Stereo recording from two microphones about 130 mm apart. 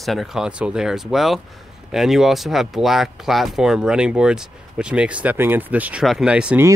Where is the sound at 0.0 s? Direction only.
Centre (ahead or behind).